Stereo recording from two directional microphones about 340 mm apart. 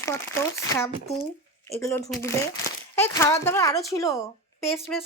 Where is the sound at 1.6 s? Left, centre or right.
Centre.